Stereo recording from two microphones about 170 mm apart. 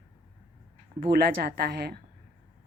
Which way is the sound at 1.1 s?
70° right (ahead or behind).